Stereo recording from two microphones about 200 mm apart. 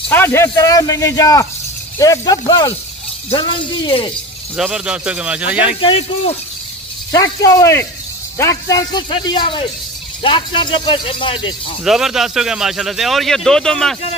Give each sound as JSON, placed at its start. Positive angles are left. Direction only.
{"t": 0.1, "sound": "speech", "side_deg": 10}
{"t": 4.6, "sound": "speech", "side_deg": -5}
{"t": 5.8, "sound": "speech", "side_deg": 30}
{"t": 7.1, "sound": "speech", "side_deg": 15}
{"t": 11.8, "sound": "speech", "side_deg": 0}